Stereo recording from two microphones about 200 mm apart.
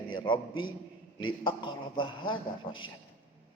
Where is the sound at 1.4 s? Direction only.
25° left (ahead or behind).